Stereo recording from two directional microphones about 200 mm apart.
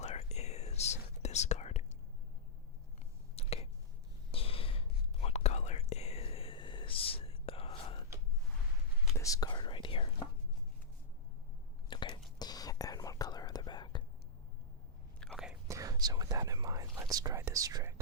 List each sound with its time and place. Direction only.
0.0 s whispering: 30° left (ahead or behind)
3.3 s a sound: 30° left (ahead or behind)
4.3 s whispering: 30° left (ahead or behind)
9.1 s whispering: 15° left (ahead or behind)
11.9 s whispering: 25° left (ahead or behind)
15.2 s whispering: centre (ahead or behind)
15.6 s whispering: 15° right (ahead or behind)